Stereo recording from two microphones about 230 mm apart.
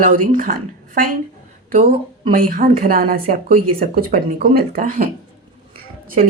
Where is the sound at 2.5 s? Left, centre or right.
Right.